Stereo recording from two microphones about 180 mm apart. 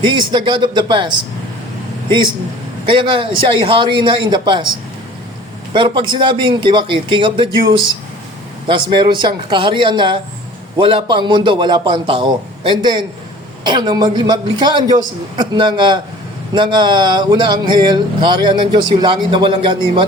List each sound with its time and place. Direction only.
0.0 s speech: 25° right (ahead or behind)
5.7 s speech: 25° right (ahead or behind)